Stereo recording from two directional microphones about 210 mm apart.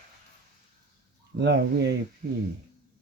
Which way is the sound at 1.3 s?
55° right (ahead or behind).